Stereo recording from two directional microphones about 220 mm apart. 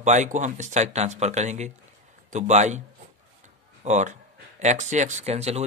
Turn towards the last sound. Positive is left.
turn(degrees=-30)  # may be behind; listen again after turning